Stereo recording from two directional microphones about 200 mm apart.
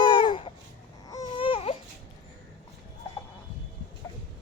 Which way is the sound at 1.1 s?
25° left (ahead or behind).